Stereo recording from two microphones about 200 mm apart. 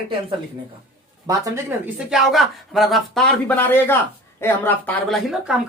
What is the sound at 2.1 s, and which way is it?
Speech, centre (ahead or behind).